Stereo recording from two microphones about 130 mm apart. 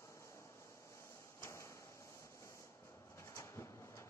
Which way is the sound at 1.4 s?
20° left (ahead or behind).